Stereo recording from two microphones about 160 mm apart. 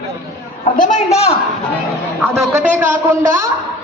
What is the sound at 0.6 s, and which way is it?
Speech, 55° left (ahead or behind).